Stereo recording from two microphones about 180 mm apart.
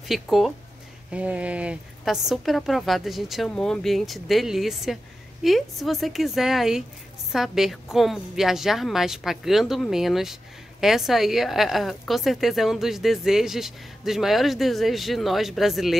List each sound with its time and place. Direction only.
0.1 s a woman's voice: centre (ahead or behind)